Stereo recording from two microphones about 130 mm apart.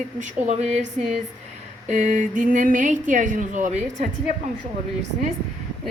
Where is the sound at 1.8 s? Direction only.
65° right (ahead or behind).